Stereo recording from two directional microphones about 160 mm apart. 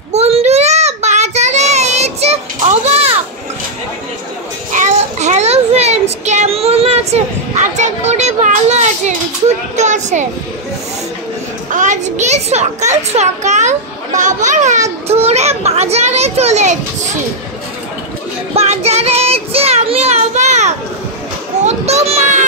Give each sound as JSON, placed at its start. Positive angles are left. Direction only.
{"t": 0.1, "sound": "child singing", "side_deg": -40}
{"t": 4.7, "sound": "child singing", "side_deg": -45}
{"t": 9.8, "sound": "a child's voice", "side_deg": -45}
{"t": 11.7, "sound": "a child's voice", "side_deg": -50}
{"t": 18.5, "sound": "child singing", "side_deg": -40}
{"t": 21.6, "sound": "children playing", "side_deg": -45}